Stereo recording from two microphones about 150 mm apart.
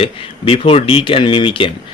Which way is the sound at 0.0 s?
40° left (ahead or behind).